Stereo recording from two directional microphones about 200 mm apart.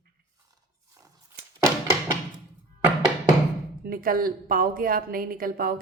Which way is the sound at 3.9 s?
45° right (ahead or behind).